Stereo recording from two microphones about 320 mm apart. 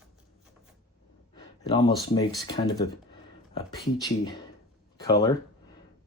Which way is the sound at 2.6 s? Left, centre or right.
Centre.